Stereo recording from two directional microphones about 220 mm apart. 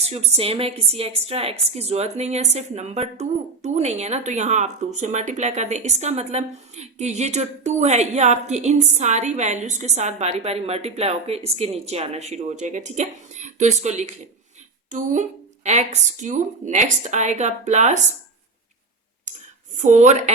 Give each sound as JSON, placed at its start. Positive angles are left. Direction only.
{"t": 0.0, "sound": "a woman's voice", "side_deg": -30}
{"t": 19.7, "sound": "a woman's voice", "side_deg": -35}